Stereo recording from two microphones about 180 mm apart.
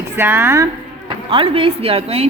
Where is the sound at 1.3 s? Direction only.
30° right (ahead or behind).